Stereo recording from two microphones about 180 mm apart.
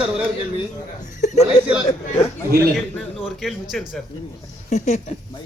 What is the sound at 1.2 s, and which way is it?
Chuckle, 40° left (ahead or behind).